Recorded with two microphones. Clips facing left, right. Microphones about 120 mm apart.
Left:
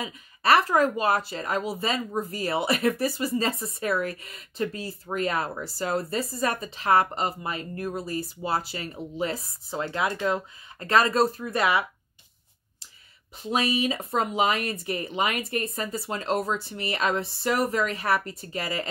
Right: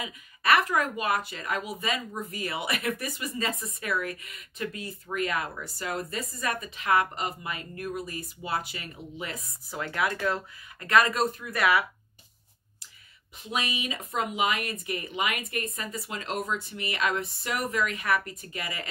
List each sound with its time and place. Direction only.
0.0 s speech: 30° left (ahead or behind)
13.4 s speech: 35° left (ahead or behind)